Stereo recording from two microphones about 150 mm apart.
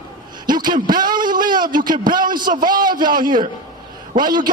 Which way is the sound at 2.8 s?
30° right (ahead or behind).